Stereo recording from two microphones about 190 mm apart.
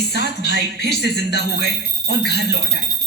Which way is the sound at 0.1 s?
60° left (ahead or behind).